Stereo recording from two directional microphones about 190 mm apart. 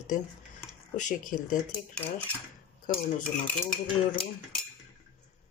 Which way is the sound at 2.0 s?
10° left (ahead or behind).